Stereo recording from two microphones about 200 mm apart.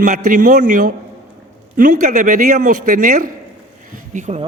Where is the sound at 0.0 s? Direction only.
40° right (ahead or behind).